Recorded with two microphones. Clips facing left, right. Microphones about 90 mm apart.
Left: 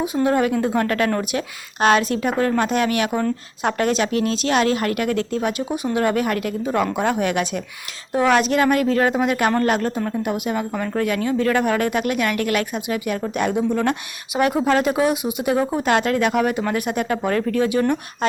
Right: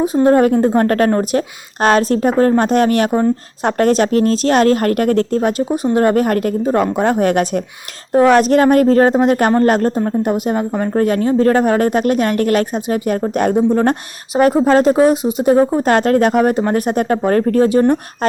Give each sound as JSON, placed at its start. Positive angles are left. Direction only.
{"t": 0.0, "sound": "a woman's voice", "side_deg": -40}